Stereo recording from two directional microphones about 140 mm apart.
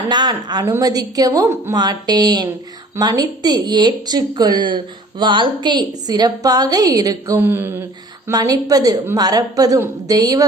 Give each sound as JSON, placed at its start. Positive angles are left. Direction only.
{"t": 0.1, "sound": "a woman's voice", "side_deg": -30}